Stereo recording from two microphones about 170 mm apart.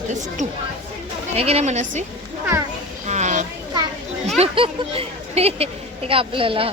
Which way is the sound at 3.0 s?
45° right (ahead or behind).